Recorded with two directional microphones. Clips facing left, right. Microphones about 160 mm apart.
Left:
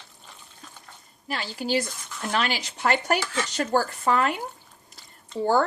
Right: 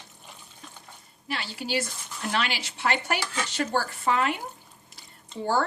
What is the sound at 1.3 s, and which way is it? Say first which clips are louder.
Cutlery: left 4 dB; 40° left (ahead or behind).